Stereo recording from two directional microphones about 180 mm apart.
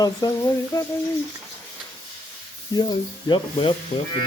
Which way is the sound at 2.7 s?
25° left (ahead or behind).